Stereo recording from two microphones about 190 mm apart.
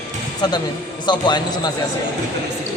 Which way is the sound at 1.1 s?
25° left (ahead or behind).